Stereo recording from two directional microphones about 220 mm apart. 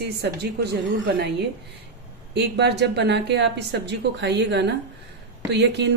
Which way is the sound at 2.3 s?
50° right (ahead or behind).